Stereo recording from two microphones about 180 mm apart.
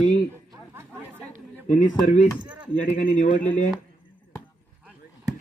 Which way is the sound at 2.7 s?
45° left (ahead or behind).